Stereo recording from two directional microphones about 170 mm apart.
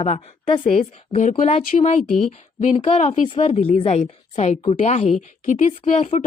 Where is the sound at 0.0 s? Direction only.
35° left (ahead or behind).